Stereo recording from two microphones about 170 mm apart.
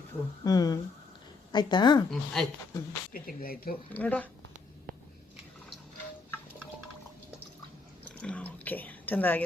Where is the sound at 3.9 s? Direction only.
10° left (ahead or behind).